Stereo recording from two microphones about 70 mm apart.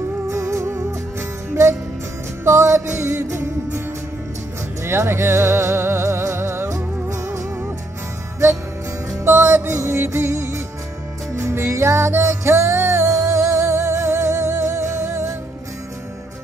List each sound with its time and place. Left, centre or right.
0.3 s music: right
4.8 s music: right
9.2 s music: right